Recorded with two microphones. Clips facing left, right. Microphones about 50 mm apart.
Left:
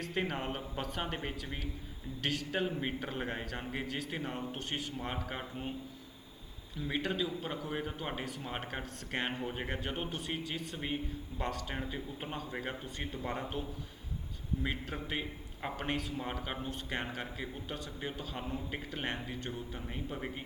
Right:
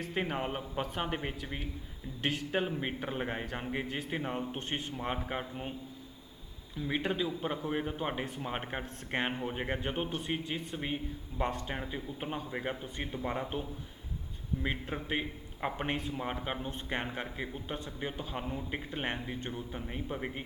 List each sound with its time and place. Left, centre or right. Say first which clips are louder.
0.0 s a man's voice: right 2 dB; centre
5.2 s a man's voice: right 2 dB; centre
7.0 s a man's voice: right 2 dB; centre